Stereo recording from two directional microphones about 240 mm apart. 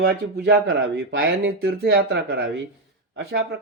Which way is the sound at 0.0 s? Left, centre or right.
Right.